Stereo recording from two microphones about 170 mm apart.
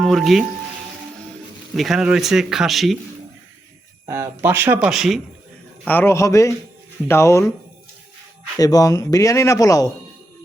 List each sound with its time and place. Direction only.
0.0 s speech: centre (ahead or behind)
1.7 s speech: centre (ahead or behind)
4.0 s speech: 15° right (ahead or behind)
5.8 s a man's voice: 10° left (ahead or behind)
8.5 s speech: 20° left (ahead or behind)